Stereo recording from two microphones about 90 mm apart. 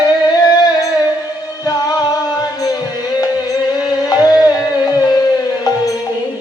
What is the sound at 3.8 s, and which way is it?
Music, 45° left (ahead or behind).